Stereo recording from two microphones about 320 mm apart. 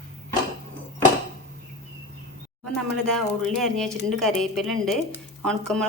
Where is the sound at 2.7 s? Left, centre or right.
Centre.